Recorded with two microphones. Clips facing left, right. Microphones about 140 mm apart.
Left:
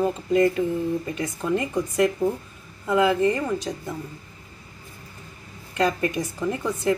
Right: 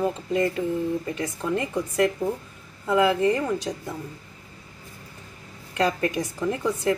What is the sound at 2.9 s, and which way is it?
Speech, centre (ahead or behind).